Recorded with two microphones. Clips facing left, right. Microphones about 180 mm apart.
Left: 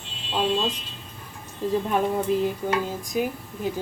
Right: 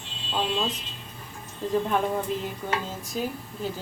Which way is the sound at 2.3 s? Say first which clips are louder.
Left 6 dB; 5° left (ahead or behind).